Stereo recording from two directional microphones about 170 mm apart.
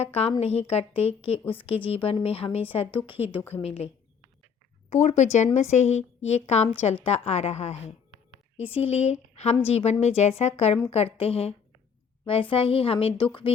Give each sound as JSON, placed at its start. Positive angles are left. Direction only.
{"t": 0.0, "sound": "a woman's voice", "side_deg": 35}